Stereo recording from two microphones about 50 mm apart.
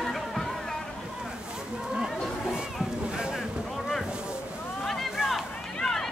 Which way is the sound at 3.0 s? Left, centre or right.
Centre.